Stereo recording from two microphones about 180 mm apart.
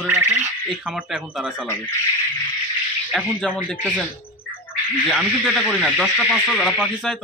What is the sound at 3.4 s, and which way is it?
Speech, 5° left (ahead or behind).